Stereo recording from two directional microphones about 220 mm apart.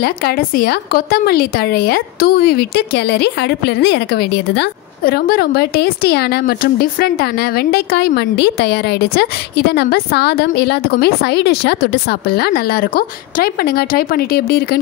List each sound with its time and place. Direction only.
0.0 s a woman's voice: 45° left (ahead or behind)